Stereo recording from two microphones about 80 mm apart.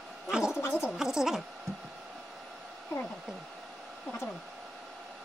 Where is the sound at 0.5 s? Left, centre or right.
Left.